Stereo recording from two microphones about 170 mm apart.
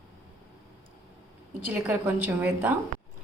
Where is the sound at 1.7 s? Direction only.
10° right (ahead or behind).